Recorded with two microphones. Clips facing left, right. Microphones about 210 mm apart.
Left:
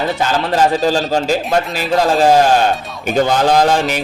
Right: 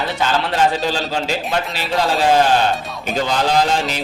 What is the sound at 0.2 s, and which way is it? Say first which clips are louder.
A man's voice: left 1 dB; 40° left (ahead or behind).